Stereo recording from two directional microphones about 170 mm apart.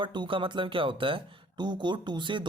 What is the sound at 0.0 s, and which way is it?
Speech, 30° right (ahead or behind).